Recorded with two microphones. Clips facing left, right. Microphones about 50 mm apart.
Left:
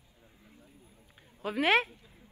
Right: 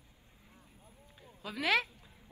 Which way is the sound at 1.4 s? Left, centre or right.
Left.